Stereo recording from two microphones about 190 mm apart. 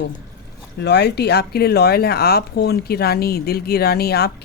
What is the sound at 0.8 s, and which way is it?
Speech, 60° left (ahead or behind).